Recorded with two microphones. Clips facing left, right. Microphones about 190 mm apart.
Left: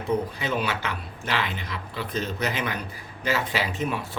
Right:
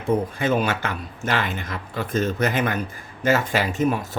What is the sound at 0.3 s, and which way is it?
Speech, 50° right (ahead or behind).